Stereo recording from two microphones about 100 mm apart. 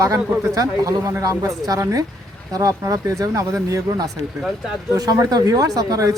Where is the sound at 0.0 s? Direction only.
35° right (ahead or behind).